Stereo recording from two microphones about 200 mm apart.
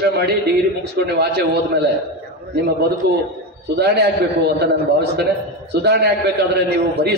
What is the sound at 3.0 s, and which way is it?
Speech, 55° right (ahead or behind).